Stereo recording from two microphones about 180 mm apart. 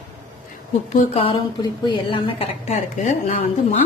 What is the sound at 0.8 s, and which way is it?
A woman's voice, 40° left (ahead or behind).